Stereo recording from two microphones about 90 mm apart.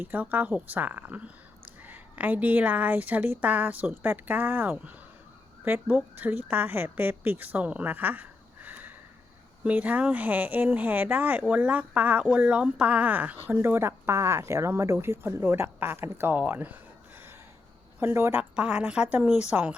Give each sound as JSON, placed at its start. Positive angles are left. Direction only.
{"t": 0.0, "sound": "a woman's voice", "side_deg": -20}
{"t": 18.0, "sound": "speech", "side_deg": -25}
{"t": 18.5, "sound": "a woman's voice", "side_deg": -15}